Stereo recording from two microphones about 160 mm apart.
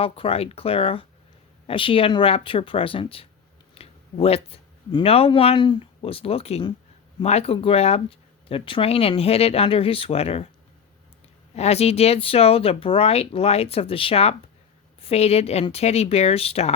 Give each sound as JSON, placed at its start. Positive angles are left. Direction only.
{"t": 0.0, "sound": "speech", "side_deg": 35}
{"t": 11.5, "sound": "speech", "side_deg": 40}